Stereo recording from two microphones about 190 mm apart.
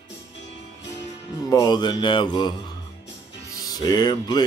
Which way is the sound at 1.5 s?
20° left (ahead or behind).